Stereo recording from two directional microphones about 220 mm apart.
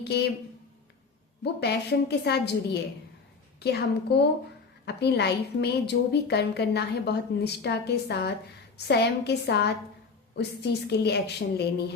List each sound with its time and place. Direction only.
0.0 s a woman's voice: 50° left (ahead or behind)
1.6 s a woman's voice: 50° left (ahead or behind)
3.6 s a woman's voice: 50° left (ahead or behind)